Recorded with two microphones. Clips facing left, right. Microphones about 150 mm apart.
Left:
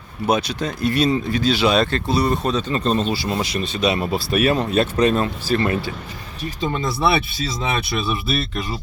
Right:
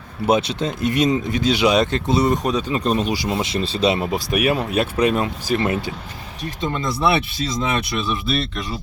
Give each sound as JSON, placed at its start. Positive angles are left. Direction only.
{"t": 0.3, "sound": "speech", "side_deg": -25}
{"t": 6.4, "sound": "speech", "side_deg": 5}